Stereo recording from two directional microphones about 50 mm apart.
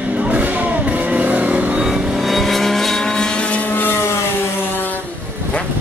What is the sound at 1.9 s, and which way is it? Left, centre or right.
Vehicle, centre.